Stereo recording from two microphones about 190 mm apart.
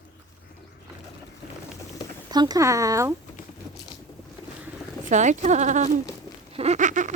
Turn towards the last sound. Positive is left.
turn(degrees=-40)  # may be behind; listen again after turning